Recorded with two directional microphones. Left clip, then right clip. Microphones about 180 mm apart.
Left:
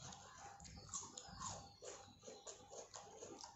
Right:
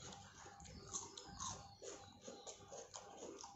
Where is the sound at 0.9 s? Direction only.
5° right (ahead or behind).